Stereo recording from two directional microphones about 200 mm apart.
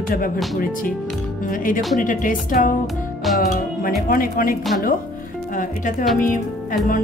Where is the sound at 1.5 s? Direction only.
45° left (ahead or behind).